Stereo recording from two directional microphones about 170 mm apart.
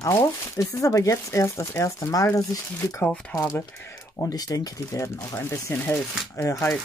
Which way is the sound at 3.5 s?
15° left (ahead or behind).